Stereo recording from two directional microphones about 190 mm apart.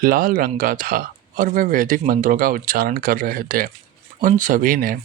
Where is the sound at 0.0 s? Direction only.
50° right (ahead or behind).